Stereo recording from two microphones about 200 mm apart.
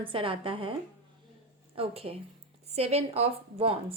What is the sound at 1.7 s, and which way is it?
A woman's voice, 30° right (ahead or behind).